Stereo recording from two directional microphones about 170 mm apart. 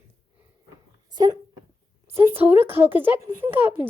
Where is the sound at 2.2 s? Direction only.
10° right (ahead or behind).